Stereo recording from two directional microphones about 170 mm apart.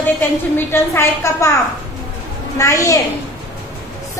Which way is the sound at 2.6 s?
20° left (ahead or behind).